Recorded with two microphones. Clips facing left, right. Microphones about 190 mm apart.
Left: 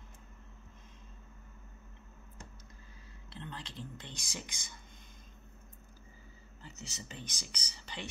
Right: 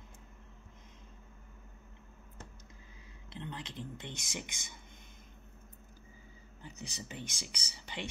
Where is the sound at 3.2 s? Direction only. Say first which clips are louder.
Right 2 dB; 20° right (ahead or behind).